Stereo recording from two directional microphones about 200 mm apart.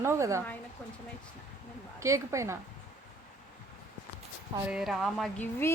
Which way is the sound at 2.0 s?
15° right (ahead or behind).